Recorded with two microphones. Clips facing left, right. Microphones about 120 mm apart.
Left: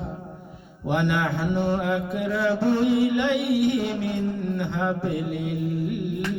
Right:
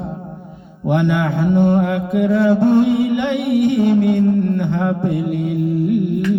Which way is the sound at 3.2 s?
5° left (ahead or behind).